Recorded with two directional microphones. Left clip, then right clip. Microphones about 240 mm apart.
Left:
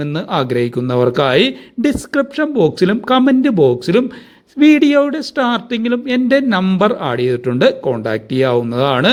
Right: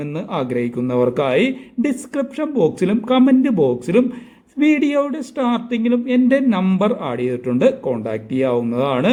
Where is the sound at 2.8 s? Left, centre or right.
Left.